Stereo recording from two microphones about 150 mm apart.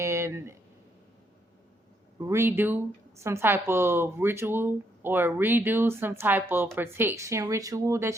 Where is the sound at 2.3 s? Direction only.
15° right (ahead or behind).